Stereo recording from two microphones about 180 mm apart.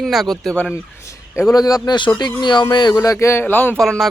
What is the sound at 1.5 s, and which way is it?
Speech, 20° left (ahead or behind).